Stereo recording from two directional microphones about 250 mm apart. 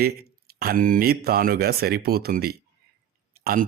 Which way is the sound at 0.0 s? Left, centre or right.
Right.